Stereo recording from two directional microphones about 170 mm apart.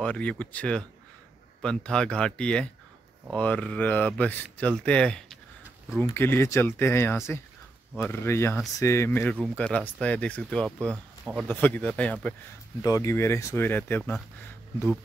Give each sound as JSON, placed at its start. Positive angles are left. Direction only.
{"t": 0.0, "sound": "speech", "side_deg": 5}
{"t": 12.8, "sound": "speech", "side_deg": 20}